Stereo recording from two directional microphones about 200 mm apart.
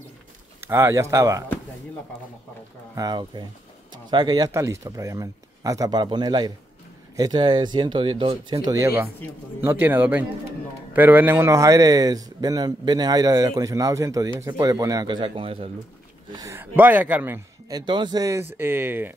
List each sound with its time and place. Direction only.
0.6 s a man's voice: 10° right (ahead or behind)
3.0 s a man's voice: 20° right (ahead or behind)
16.3 s a man's voice: 15° right (ahead or behind)